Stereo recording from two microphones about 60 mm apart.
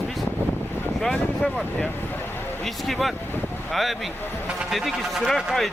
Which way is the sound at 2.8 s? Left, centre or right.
Centre.